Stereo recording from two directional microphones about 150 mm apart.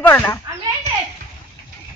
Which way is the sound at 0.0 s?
15° left (ahead or behind).